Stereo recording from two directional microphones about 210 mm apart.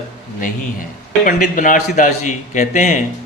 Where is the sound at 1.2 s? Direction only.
40° left (ahead or behind).